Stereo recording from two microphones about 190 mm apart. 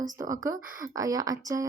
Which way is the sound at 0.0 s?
15° right (ahead or behind).